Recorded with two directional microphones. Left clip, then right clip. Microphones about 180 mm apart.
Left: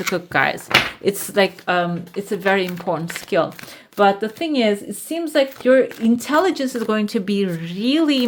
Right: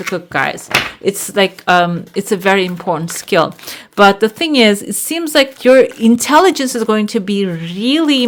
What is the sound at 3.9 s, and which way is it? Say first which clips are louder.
Speech: right 7 dB; 40° right (ahead or behind).